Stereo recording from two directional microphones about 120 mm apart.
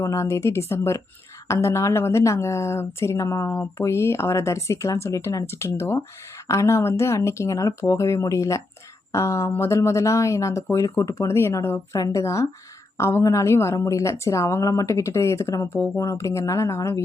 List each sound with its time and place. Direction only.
0.0 s speech: 25° left (ahead or behind)